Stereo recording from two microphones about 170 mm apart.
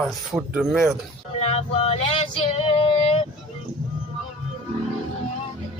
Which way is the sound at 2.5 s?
35° left (ahead or behind).